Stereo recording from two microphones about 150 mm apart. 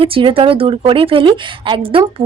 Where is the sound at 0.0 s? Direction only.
35° right (ahead or behind).